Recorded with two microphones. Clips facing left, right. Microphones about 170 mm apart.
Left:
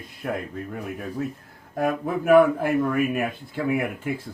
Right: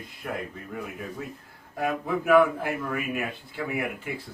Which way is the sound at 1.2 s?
50° left (ahead or behind).